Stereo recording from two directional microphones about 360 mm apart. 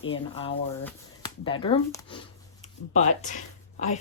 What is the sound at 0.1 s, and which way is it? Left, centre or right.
Speech, centre.